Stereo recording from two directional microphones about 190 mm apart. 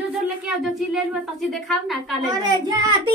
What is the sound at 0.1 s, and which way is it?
A woman's voice, 5° right (ahead or behind).